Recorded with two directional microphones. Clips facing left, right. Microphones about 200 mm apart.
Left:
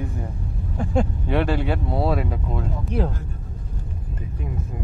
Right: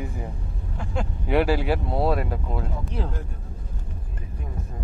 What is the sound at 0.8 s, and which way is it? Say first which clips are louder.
Speech: left 8 dB; 45° left (ahead or behind).